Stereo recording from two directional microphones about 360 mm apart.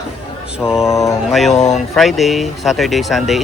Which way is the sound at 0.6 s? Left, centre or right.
Centre.